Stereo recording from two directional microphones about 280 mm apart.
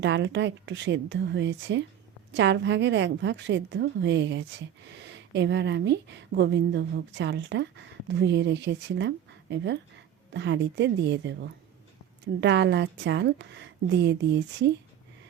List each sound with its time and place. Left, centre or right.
0.0 s a woman's voice: right